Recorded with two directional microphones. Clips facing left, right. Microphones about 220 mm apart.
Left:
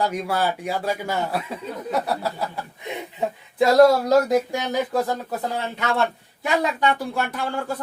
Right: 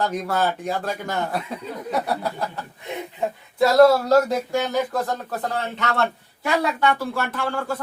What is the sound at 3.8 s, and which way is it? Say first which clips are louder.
Speech: right 2 dB; 15° left (ahead or behind).